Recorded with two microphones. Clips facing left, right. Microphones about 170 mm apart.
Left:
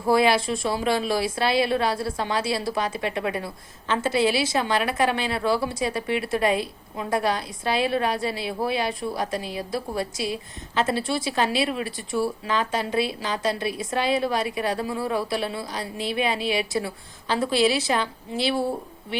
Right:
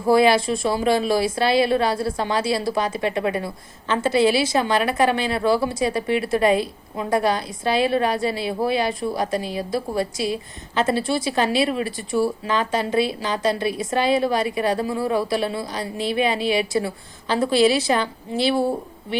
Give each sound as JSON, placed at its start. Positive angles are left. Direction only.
{"t": 0.1, "sound": "speech", "side_deg": 0}